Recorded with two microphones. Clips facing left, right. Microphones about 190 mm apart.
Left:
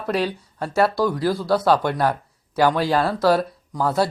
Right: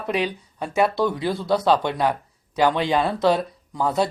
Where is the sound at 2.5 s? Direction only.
15° right (ahead or behind).